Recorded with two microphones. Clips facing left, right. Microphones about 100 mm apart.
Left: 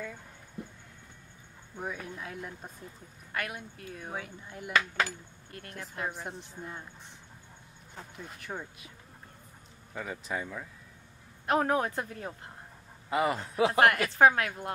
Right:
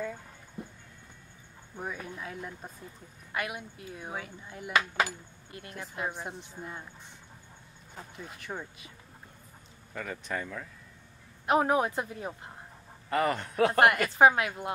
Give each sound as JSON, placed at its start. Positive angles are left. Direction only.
{"t": 1.8, "sound": "speech", "side_deg": 0}
{"t": 3.3, "sound": "cutlery", "side_deg": -15}
{"t": 4.1, "sound": "speech", "side_deg": 0}
{"t": 4.7, "sound": "cutlery", "side_deg": -15}
{"t": 5.8, "sound": "speech", "side_deg": -5}
{"t": 7.9, "sound": "speech", "side_deg": 0}
{"t": 9.9, "sound": "speech", "side_deg": 10}
{"t": 11.4, "sound": "cutlery", "side_deg": -10}
{"t": 13.1, "sound": "speech", "side_deg": 5}
{"t": 14.1, "sound": "cutlery", "side_deg": -10}